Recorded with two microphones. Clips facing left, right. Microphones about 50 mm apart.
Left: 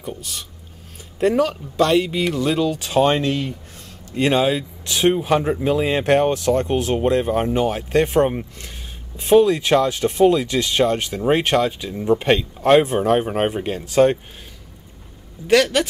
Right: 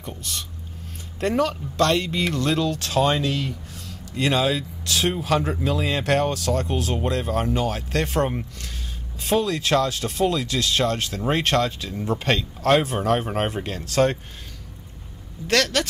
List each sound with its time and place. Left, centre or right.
0.0 s speech: centre
3.0 s speech: left; by 14.1 s centre
15.4 s speech: centre